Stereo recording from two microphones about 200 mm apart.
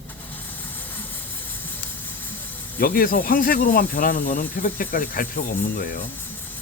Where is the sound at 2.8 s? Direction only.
45° left (ahead or behind).